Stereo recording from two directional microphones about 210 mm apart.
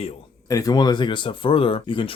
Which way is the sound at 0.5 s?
20° left (ahead or behind).